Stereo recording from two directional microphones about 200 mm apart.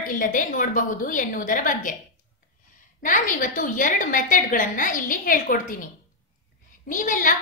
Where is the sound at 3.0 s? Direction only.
40° left (ahead or behind).